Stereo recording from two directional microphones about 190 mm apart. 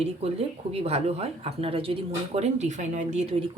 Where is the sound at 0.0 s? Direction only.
35° right (ahead or behind).